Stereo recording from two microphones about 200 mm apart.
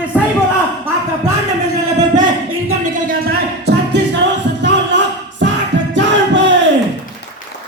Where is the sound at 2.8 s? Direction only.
40° right (ahead or behind).